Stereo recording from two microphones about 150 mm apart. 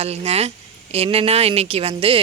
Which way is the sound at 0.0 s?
45° right (ahead or behind).